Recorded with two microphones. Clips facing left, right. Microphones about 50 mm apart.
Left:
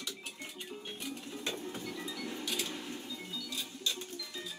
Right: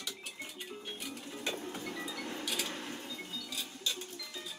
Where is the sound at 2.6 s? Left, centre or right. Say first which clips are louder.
Even; right.